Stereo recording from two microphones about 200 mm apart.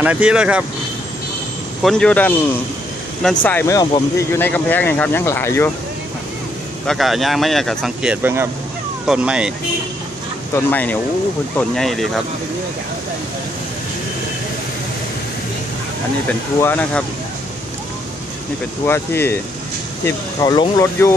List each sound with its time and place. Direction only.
0.0 s speech: 5° right (ahead or behind)
1.8 s speech: 5° left (ahead or behind)
6.9 s speech: centre (ahead or behind)
10.5 s speech: 10° left (ahead or behind)
16.5 s speech: 10° left (ahead or behind)
18.9 s speech: 10° left (ahead or behind)